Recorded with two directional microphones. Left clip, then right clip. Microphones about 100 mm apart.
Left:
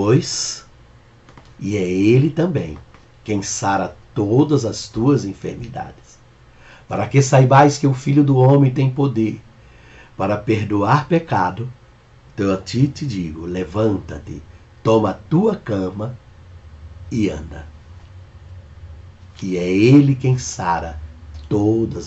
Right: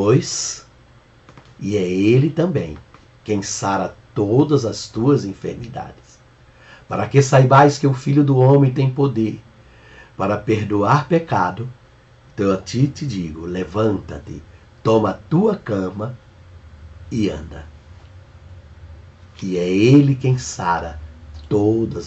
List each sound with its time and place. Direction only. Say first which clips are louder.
0.0 s speech: even; 15° left (ahead or behind)
1.6 s speech: even; 15° left (ahead or behind)
6.9 s speech: right 1 dB; 15° left (ahead or behind)
12.6 s speech: left 1 dB; 10° left (ahead or behind)
17.1 s speech: left 1 dB; 10° left (ahead or behind)
19.4 s speech: even; 10° left (ahead or behind)